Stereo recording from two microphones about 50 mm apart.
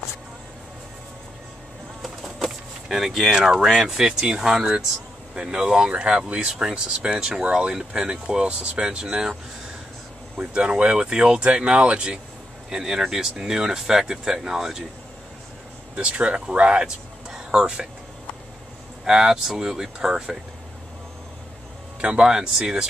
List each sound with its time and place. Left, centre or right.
2.0 s a sound: centre
3.3 s speech: centre
10.3 s speech: right
12.6 s speech: centre
16.0 s speech: right
19.0 s speech: centre
22.0 s speech: right